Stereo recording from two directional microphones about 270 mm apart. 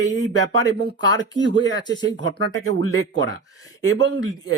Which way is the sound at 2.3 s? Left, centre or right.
Right.